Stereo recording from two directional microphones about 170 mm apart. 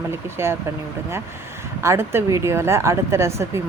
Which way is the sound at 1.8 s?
15° right (ahead or behind).